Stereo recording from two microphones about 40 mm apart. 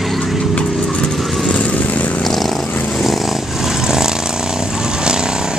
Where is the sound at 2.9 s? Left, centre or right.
Centre.